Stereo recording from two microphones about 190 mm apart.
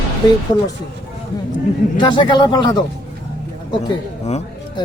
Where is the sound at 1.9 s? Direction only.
25° left (ahead or behind).